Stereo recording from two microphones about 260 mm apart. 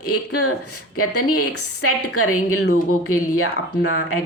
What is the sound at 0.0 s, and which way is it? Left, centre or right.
A woman's voice, left.